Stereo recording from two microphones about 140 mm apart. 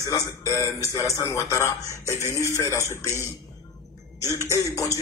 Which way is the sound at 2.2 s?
20° right (ahead or behind).